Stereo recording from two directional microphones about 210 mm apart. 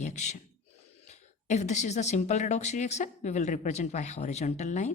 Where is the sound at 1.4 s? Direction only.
35° left (ahead or behind).